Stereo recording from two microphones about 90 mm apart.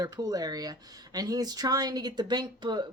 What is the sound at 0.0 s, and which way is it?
Speech, 40° right (ahead or behind).